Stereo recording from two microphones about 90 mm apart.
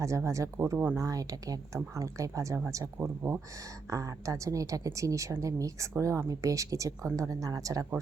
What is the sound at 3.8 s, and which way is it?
A woman's voice, 35° right (ahead or behind).